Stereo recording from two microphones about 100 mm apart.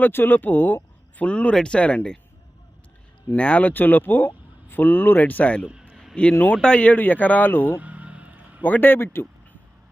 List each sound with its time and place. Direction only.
0.0 s speech: 20° left (ahead or behind)
3.3 s speech: 15° left (ahead or behind)
5.6 s a sound: 10° right (ahead or behind)
6.4 s speech: 10° left (ahead or behind)
7.7 s vehicle: 15° right (ahead or behind)
8.6 s speech: 20° left (ahead or behind)